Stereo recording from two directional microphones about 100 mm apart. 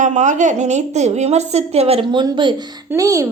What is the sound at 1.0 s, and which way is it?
A woman's voice, 90° right.